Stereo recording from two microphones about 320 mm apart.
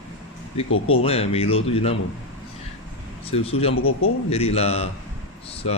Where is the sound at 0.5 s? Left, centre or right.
Centre.